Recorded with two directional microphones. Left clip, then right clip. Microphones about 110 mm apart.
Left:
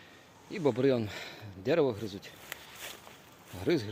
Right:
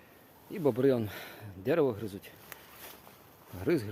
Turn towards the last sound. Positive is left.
turn(degrees=-35)  # may be behind; listen again after turning